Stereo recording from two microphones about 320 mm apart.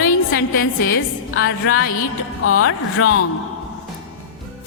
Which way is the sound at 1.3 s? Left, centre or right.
Left.